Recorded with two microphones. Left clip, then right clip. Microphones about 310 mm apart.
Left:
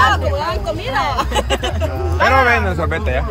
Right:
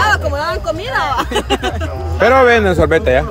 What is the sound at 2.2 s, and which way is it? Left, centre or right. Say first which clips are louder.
Speech: right 4 dB; right.